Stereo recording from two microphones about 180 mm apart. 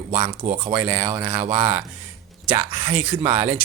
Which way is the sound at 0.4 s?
35° right (ahead or behind).